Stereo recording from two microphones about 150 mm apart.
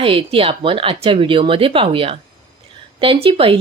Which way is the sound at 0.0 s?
35° right (ahead or behind).